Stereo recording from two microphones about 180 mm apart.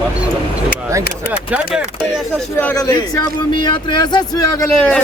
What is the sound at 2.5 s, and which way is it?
Speech, 10° left (ahead or behind).